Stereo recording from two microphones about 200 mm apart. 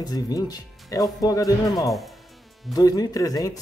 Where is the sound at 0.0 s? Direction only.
20° left (ahead or behind).